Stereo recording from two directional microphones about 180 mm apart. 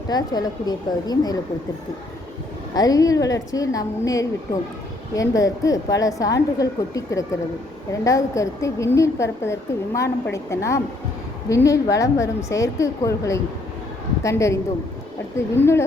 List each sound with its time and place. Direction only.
0.1 s a woman's voice: 20° left (ahead or behind)
2.7 s a woman's voice: 20° left (ahead or behind)